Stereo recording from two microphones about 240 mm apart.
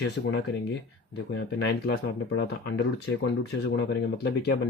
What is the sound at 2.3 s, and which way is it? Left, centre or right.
Speech, left.